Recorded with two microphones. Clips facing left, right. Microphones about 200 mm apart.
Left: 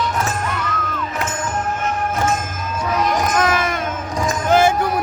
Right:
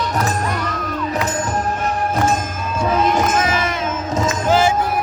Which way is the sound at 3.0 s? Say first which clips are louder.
Even; 25° right (ahead or behind).